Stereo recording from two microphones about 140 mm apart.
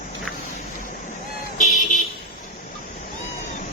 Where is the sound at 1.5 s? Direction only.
70° left (ahead or behind).